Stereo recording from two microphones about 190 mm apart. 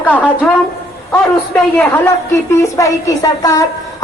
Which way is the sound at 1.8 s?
10° left (ahead or behind).